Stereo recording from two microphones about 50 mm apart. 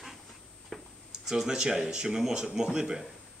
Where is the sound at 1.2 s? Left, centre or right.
Centre.